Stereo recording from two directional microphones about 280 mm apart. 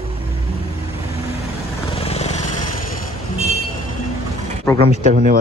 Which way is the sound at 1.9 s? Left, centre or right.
Left.